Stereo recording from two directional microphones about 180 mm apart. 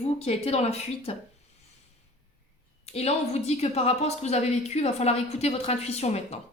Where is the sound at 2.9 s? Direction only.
35° left (ahead or behind).